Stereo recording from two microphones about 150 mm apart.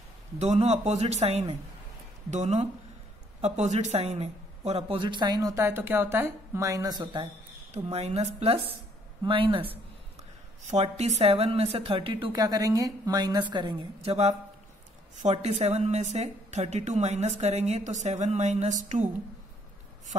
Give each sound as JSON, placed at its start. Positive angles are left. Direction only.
{"t": 0.4, "sound": "a woman's voice", "side_deg": -45}
{"t": 7.7, "sound": "a woman's voice", "side_deg": -45}
{"t": 10.6, "sound": "a woman's voice", "side_deg": -45}
{"t": 12.3, "sound": "a woman's voice", "side_deg": -25}